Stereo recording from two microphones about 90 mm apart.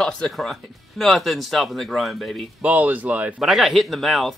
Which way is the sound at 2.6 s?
15° right (ahead or behind).